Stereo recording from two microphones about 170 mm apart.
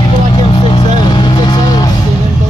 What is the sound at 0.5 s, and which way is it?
Vehicle, 30° left (ahead or behind).